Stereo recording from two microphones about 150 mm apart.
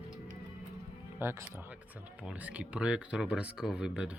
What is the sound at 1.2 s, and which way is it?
Speech, 15° right (ahead or behind).